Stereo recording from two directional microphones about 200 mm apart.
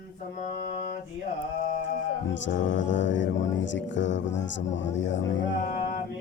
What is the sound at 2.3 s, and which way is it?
Music, 65° left (ahead or behind).